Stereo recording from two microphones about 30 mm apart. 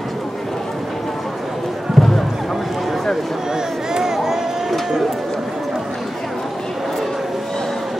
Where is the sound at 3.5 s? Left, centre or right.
Centre.